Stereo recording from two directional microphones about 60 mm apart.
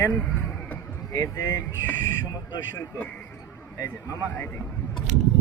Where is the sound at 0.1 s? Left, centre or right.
Left.